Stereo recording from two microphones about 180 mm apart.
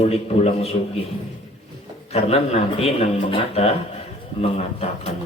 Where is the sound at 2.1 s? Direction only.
35° left (ahead or behind).